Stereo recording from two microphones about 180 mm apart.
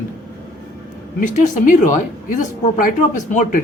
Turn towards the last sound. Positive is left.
turn(degrees=45)  # may be behind; listen again after turning